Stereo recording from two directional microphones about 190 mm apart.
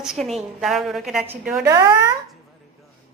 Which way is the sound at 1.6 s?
15° right (ahead or behind).